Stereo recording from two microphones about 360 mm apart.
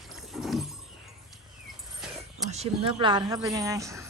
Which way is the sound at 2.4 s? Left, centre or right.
Centre.